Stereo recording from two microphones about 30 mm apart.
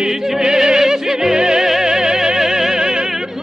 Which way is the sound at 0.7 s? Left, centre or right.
Centre.